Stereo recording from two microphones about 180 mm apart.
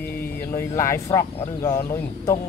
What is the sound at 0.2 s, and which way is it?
Speech, 15° left (ahead or behind).